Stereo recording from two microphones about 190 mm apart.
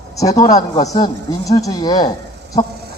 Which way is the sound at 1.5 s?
20° left (ahead or behind).